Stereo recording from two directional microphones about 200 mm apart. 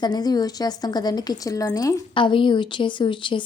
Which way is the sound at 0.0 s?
20° left (ahead or behind).